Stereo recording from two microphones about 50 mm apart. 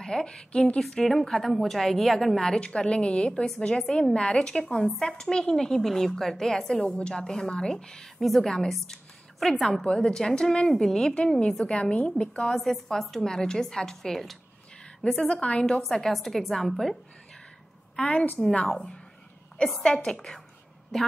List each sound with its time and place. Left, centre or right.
0.0 s a woman's voice: centre
3.8 s a woman's voice: centre
4.1 s a woman's voice: centre
12.1 s a woman's voice: centre
15.1 s a woman's voice: left
15.9 s a woman's voice: centre